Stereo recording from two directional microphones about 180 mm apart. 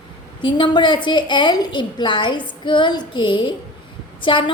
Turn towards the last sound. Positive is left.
turn(degrees=25)  # may be behind; listen again after turning